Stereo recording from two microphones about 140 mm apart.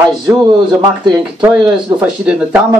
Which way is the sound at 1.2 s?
5° right (ahead or behind).